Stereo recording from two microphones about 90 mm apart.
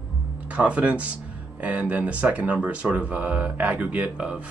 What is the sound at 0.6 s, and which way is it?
Speech, 15° right (ahead or behind).